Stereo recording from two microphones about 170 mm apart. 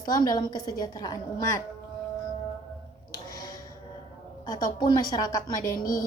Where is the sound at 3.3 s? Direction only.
20° left (ahead or behind).